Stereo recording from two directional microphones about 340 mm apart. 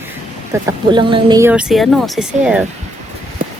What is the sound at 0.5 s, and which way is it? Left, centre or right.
Speech, centre.